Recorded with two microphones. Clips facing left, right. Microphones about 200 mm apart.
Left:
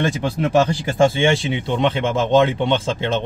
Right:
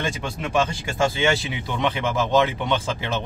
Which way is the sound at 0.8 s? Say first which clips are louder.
Left 6 dB; 30° left (ahead or behind).